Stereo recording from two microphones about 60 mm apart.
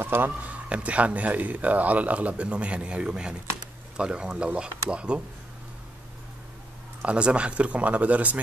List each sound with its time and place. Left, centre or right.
0.0 s speech: right
0.5 s speech: right
7.0 s speech: centre